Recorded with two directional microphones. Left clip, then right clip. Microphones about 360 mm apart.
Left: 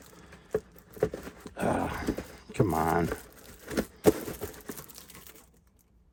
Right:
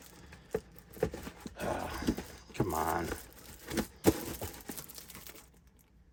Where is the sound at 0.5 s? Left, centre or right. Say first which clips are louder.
Left 5 dB; centre.